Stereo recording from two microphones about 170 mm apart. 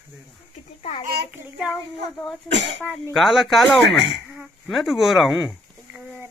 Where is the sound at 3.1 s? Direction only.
Centre (ahead or behind).